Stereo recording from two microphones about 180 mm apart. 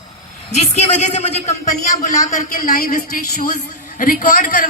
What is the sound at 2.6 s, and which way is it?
A man's voice, 55° left (ahead or behind).